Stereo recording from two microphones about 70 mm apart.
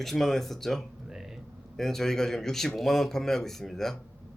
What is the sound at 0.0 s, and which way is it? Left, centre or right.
Speech, centre.